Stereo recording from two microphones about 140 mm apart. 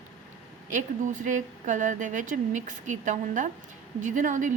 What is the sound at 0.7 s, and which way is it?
A woman's voice, 65° right (ahead or behind).